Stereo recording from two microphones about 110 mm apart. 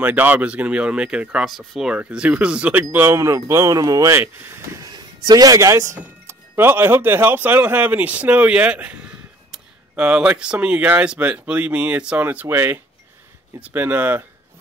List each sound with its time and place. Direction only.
0.0 s speech: 15° right (ahead or behind)
4.7 s speech: 40° right (ahead or behind); by 14.2 s 15° right (ahead or behind)